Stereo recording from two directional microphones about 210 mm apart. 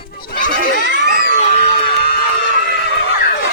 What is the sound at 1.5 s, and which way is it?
Music, 30° left (ahead or behind).